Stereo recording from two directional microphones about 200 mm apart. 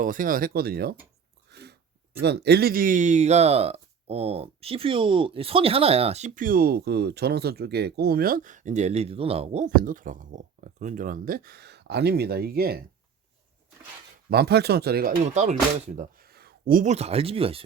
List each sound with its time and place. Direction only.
0.0 s speech: 45° right (ahead or behind)
1.5 s a sound: 55° right (ahead or behind)
2.2 s speech: 55° right (ahead or behind)
14.3 s speech: 55° right (ahead or behind); by 17.6 s 30° right (ahead or behind)